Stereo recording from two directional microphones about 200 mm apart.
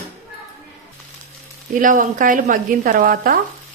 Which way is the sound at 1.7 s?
40° right (ahead or behind).